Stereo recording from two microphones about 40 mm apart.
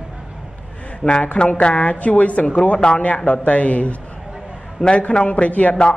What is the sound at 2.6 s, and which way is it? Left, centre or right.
Speech, left.